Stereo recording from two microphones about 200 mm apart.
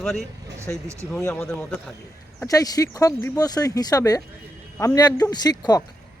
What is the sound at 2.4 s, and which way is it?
Speech, 15° left (ahead or behind).